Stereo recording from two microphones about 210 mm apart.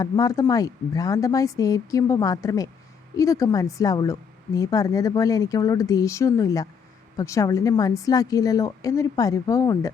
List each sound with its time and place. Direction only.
0.0 s a woman's voice: 15° left (ahead or behind)